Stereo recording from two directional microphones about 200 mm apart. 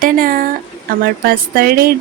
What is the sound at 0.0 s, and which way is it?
Speech, 45° right (ahead or behind).